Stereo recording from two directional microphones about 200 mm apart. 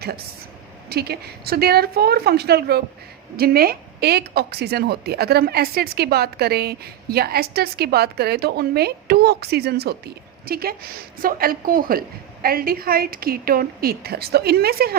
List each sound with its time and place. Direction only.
0.9 s a woman's voice: 50° right (ahead or behind)